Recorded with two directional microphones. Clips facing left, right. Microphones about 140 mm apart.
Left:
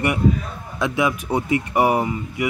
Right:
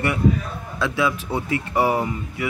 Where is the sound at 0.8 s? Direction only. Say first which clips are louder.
Left 1 dB; 15° left (ahead or behind).